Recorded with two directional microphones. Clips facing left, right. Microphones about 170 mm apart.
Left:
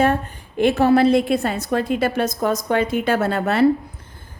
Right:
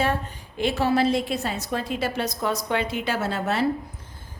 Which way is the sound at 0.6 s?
55° left (ahead or behind).